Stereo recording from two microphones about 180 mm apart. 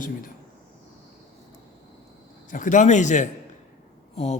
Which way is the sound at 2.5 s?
45° left (ahead or behind).